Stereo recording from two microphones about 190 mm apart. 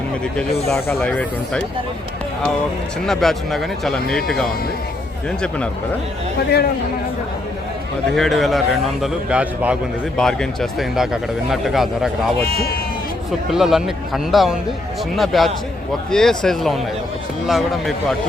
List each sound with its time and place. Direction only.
0.7 s speech: 5° left (ahead or behind)
3.1 s speech: centre (ahead or behind)
8.1 s speech: centre (ahead or behind)
12.5 s speech: 55° left (ahead or behind)
13.5 s speech: centre (ahead or behind)